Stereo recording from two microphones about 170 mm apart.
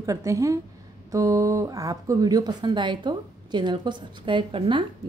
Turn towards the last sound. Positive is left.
turn(degrees=-30)  # may be behind; listen again after turning